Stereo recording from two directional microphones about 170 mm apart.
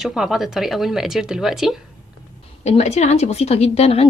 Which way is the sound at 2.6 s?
40° left (ahead or behind).